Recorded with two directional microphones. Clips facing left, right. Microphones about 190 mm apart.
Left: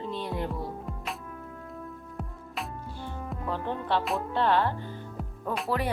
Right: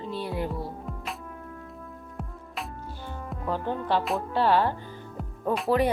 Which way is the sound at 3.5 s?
5° right (ahead or behind).